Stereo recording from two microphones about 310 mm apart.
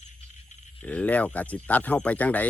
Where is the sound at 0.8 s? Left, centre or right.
Centre.